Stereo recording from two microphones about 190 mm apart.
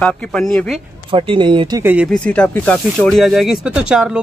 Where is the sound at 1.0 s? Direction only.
30° right (ahead or behind).